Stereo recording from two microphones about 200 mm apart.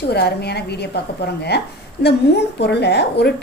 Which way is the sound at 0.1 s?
55° left (ahead or behind).